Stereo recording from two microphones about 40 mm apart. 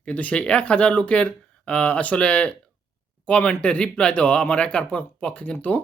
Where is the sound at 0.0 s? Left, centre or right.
Left.